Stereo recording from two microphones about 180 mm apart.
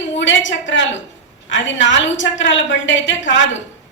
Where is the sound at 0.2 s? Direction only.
90° left.